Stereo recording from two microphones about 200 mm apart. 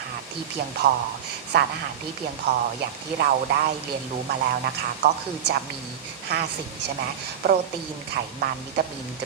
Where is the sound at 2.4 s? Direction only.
60° right (ahead or behind).